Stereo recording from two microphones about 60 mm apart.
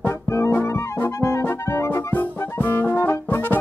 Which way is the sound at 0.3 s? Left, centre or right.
Left.